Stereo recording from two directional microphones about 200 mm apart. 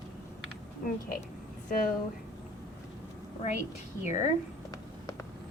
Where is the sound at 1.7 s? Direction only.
45° left (ahead or behind).